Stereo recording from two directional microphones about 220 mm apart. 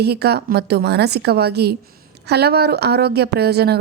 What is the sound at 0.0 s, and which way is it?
Speech, 45° right (ahead or behind).